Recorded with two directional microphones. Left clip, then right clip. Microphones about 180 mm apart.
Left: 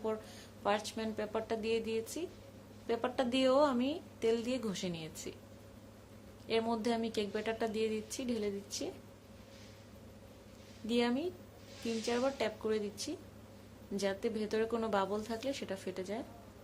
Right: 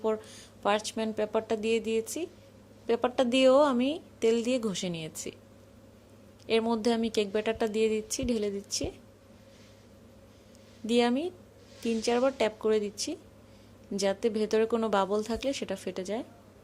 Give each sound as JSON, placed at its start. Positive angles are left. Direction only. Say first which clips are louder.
{"t": 0.0, "sound": "a woman's voice", "louder": "right 8 dB", "side_deg": -40}
{"t": 6.5, "sound": "a woman's voice", "louder": "right 7 dB", "side_deg": -40}
{"t": 10.8, "sound": "a woman's voice", "louder": "right 7 dB", "side_deg": -40}